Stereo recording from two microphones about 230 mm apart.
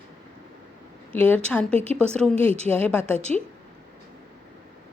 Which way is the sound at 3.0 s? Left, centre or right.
Right.